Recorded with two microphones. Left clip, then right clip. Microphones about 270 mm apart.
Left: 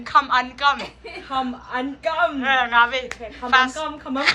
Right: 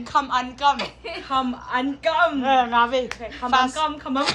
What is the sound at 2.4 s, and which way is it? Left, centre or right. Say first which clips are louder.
Speech: left 1 dB; centre.